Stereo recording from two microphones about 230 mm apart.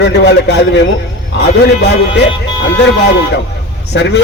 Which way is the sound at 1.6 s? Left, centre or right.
Left.